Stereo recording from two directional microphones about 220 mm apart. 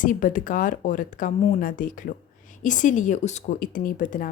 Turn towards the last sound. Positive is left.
turn(degrees=40)  # may be behind; listen again after turning